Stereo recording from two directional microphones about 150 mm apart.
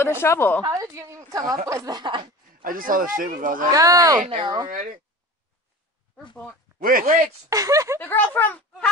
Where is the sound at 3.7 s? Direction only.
25° right (ahead or behind).